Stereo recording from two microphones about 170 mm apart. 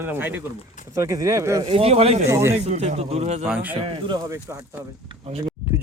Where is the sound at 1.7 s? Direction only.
35° right (ahead or behind).